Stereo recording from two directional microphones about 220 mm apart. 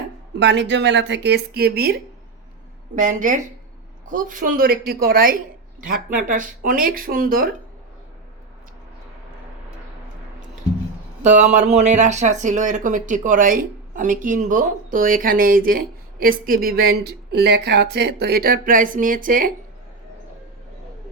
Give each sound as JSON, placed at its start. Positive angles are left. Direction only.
{"t": 0.3, "sound": "speech", "side_deg": -55}
{"t": 11.2, "sound": "speech", "side_deg": -30}